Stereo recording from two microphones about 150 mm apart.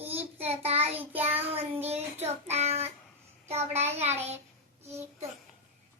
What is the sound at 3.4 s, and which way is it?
Speech, 45° right (ahead or behind).